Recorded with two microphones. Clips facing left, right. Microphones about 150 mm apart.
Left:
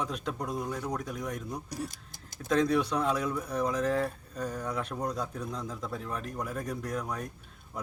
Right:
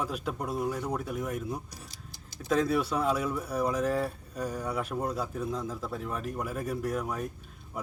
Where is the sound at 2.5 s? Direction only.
5° right (ahead or behind).